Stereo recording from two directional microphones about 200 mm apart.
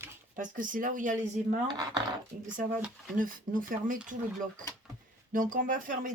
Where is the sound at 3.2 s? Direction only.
45° right (ahead or behind).